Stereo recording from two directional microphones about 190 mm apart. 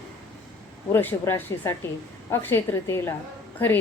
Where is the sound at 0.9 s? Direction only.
10° left (ahead or behind).